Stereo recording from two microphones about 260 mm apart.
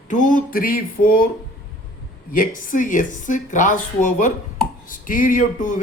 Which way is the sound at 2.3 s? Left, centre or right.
Left.